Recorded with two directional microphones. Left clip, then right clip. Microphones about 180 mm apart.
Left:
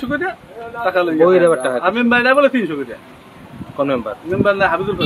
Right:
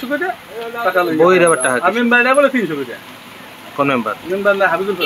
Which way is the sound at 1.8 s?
30° left (ahead or behind).